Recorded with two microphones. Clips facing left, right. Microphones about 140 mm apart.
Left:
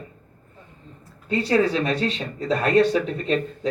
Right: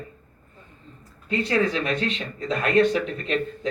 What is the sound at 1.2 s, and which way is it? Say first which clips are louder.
Speech: left 3 dB; 35° left (ahead or behind).